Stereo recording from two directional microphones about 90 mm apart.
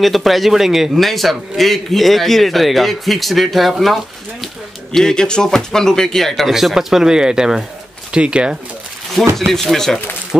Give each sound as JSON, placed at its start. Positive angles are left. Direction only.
{"t": 0.0, "sound": "a man's voice", "side_deg": 0}
{"t": 9.2, "sound": "speech", "side_deg": -35}
{"t": 9.5, "sound": "a man's voice", "side_deg": 5}